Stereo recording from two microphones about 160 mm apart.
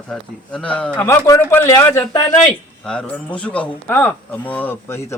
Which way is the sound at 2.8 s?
5° left (ahead or behind).